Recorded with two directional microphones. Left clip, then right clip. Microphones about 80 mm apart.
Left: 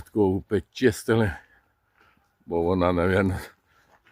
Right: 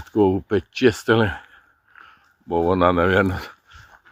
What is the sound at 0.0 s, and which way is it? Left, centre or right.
Speech, centre.